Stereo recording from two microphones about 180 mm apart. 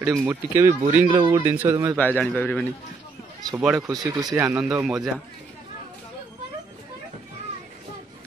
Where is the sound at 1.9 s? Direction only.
5° left (ahead or behind).